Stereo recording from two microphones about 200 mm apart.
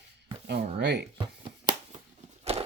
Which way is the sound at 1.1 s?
25° right (ahead or behind).